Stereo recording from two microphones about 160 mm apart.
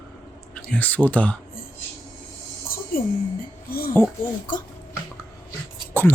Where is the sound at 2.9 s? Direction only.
65° left (ahead or behind).